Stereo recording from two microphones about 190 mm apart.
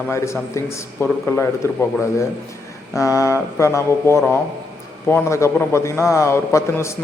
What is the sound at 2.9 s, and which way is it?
A man's voice, 15° left (ahead or behind).